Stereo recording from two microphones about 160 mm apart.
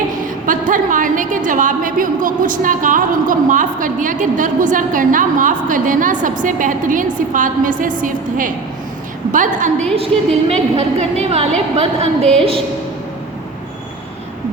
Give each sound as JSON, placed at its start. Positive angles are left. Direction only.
{"t": 0.4, "sound": "a woman's voice", "side_deg": -55}
{"t": 10.1, "sound": "a woman's voice", "side_deg": 5}
{"t": 10.5, "sound": "a woman's voice", "side_deg": -40}